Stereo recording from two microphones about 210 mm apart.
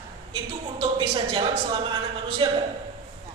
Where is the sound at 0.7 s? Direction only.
25° right (ahead or behind).